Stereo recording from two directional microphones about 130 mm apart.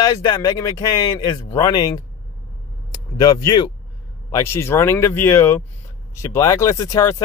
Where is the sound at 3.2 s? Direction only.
30° left (ahead or behind).